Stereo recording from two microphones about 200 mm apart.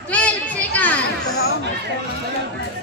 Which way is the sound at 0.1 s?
5° left (ahead or behind).